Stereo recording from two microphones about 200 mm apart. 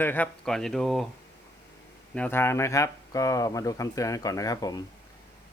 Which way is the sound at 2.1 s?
10° left (ahead or behind).